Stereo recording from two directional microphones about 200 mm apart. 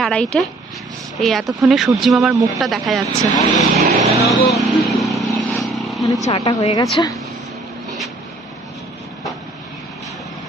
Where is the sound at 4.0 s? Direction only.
30° right (ahead or behind).